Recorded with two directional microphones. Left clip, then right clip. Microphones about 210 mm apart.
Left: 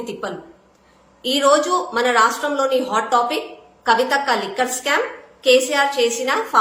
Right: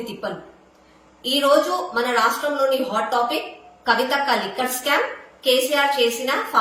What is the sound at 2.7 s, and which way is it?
Speech, 25° left (ahead or behind).